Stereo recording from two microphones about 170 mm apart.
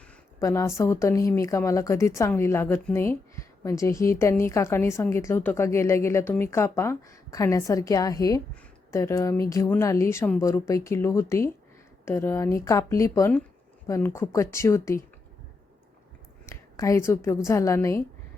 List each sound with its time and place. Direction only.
0.3 s a woman's voice: 15° left (ahead or behind)
16.5 s a woman's voice: 20° left (ahead or behind)